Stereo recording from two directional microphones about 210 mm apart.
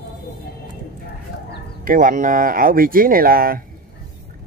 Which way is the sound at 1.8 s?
40° right (ahead or behind).